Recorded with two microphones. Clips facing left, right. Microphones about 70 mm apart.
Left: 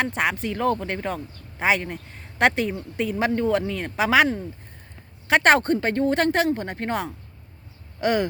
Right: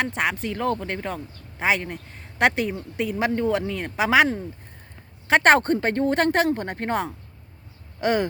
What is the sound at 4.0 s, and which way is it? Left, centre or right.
Speech, centre.